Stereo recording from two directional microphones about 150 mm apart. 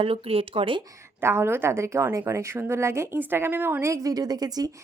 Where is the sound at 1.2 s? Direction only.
15° right (ahead or behind).